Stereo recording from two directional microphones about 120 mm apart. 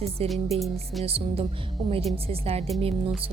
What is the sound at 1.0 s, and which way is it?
Speech, 55° right (ahead or behind).